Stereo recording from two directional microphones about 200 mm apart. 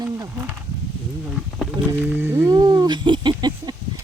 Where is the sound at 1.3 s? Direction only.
Centre (ahead or behind).